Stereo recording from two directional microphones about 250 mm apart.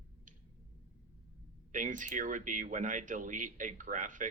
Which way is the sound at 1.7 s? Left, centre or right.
Right.